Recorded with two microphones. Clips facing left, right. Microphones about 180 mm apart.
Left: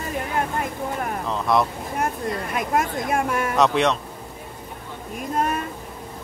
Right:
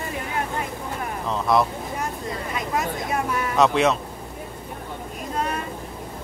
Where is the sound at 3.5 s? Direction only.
Centre (ahead or behind).